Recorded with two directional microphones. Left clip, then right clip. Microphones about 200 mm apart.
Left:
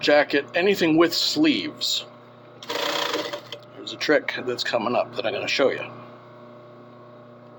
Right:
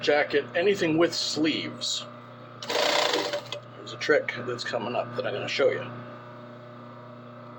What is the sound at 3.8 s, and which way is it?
Speech, 55° left (ahead or behind).